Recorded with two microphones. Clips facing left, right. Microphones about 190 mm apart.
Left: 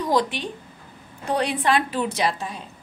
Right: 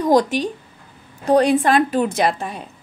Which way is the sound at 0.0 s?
45° right (ahead or behind).